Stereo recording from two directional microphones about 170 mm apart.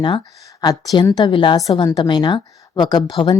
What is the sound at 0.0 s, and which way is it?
A woman's voice, 25° left (ahead or behind).